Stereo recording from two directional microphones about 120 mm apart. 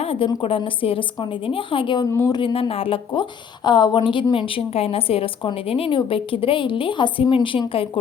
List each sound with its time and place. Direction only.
0.0 s a sound: 55° left (ahead or behind)
0.4 s a woman's voice: 50° left (ahead or behind)
2.1 s speech: 30° left (ahead or behind)
2.4 s a woman's voice: 50° left (ahead or behind)